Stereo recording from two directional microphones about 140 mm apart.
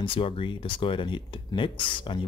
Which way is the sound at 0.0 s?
40° left (ahead or behind).